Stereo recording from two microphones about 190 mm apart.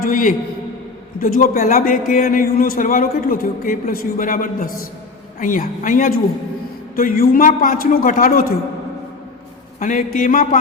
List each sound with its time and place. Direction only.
0.0 s a man's voice: 45° left (ahead or behind)
9.8 s a man's voice: 40° left (ahead or behind)